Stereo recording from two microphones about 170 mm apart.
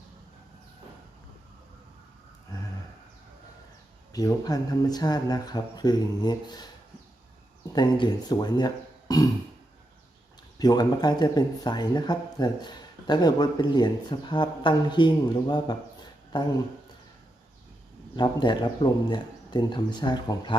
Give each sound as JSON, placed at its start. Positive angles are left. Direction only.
{"t": 4.1, "sound": "speech", "side_deg": 20}
{"t": 7.7, "sound": "speech", "side_deg": 25}
{"t": 10.6, "sound": "speech", "side_deg": 25}
{"t": 18.2, "sound": "speech", "side_deg": 25}